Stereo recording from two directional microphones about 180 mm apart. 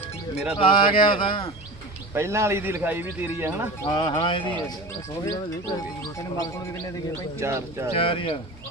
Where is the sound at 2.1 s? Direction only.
15° right (ahead or behind).